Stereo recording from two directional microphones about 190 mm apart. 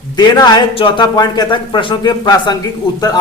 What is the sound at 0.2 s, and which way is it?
A man's voice, 25° left (ahead or behind).